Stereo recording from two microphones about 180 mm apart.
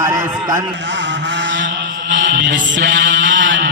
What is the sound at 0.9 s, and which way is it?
Music, 85° right.